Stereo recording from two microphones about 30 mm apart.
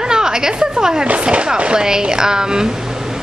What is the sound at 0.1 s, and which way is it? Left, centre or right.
A woman's voice, right.